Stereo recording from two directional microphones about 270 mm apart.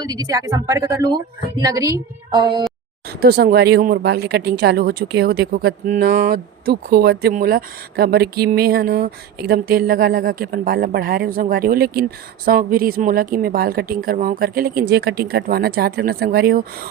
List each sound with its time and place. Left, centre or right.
0.0 s a woman's voice: centre
3.1 s speech: right